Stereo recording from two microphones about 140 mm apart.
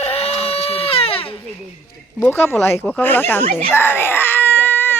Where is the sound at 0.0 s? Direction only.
45° left (ahead or behind).